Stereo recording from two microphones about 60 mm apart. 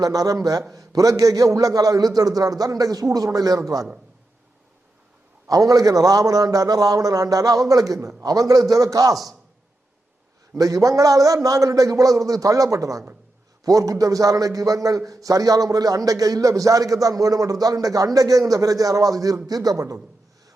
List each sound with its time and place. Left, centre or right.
0.0 s a man's voice: right
5.5 s a man's voice: right
7.7 s speech: right
10.6 s speech: right
11.4 s a man's voice: right